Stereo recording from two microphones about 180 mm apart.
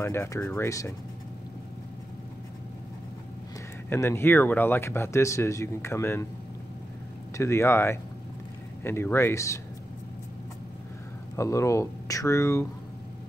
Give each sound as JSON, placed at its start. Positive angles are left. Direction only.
{"t": 0.0, "sound": "speech", "side_deg": 15}
{"t": 3.9, "sound": "speech", "side_deg": 15}
{"t": 7.3, "sound": "speech", "side_deg": 15}
{"t": 11.3, "sound": "speech", "side_deg": 15}